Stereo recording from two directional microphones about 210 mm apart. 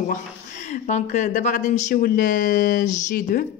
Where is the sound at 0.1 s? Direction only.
35° left (ahead or behind).